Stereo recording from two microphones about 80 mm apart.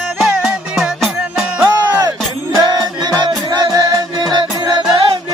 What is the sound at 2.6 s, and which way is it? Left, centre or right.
Music, right.